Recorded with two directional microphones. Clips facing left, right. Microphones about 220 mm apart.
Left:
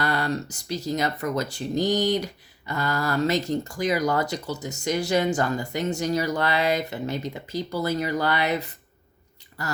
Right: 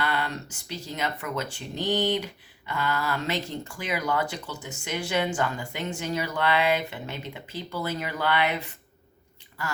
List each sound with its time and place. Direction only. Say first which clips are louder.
0.0 s speech: left 4 dB; 40° left (ahead or behind)